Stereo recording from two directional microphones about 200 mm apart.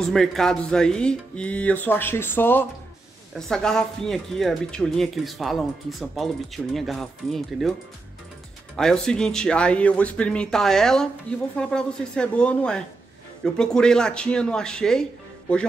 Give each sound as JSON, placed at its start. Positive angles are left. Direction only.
{"t": 0.0, "sound": "speech", "side_deg": 0}
{"t": 8.7, "sound": "speech", "side_deg": 5}